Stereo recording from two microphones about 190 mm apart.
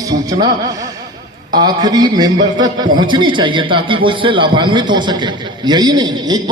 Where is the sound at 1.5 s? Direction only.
20° right (ahead or behind).